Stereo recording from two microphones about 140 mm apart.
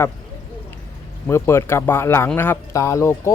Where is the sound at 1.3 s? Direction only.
20° left (ahead or behind).